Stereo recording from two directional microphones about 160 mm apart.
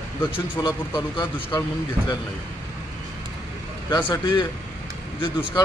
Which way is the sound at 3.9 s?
25° left (ahead or behind).